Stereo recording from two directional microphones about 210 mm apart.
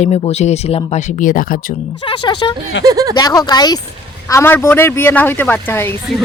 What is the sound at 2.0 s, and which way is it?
Speech, 20° left (ahead or behind).